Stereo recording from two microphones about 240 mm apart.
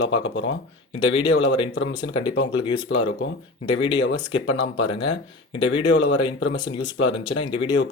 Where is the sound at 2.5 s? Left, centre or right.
Centre.